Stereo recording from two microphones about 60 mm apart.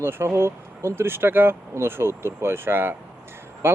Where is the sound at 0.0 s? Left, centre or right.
Right.